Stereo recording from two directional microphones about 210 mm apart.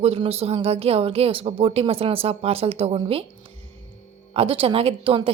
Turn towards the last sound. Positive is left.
turn(degrees=-25)  # may be behind; listen again after turning